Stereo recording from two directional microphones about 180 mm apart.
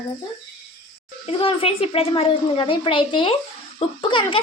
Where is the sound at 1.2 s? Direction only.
35° left (ahead or behind).